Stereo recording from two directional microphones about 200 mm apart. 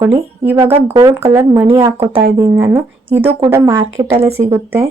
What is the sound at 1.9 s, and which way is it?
Speech, 25° right (ahead or behind).